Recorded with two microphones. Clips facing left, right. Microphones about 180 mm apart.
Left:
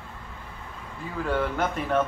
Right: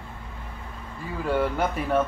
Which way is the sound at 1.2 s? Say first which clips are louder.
Right 2 dB; 10° right (ahead or behind).